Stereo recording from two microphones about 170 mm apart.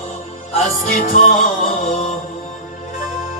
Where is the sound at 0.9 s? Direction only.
50° left (ahead or behind).